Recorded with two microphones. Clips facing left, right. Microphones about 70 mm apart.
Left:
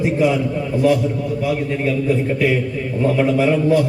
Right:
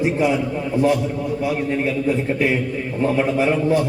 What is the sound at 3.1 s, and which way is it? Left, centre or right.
Speech, right.